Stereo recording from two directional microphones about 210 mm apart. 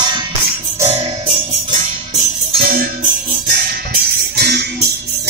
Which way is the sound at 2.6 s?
40° right (ahead or behind).